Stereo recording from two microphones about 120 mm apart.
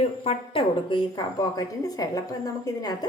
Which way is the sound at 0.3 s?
45° left (ahead or behind).